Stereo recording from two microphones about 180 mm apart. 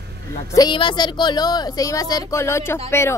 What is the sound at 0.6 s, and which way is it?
A man's voice, 25° left (ahead or behind).